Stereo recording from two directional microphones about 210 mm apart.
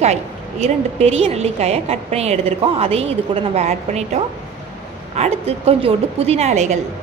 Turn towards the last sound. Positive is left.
turn(degrees=-30)  # may be behind; listen again after turning